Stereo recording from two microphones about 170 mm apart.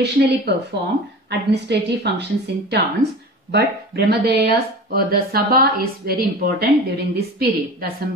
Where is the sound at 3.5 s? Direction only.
75° right (ahead or behind).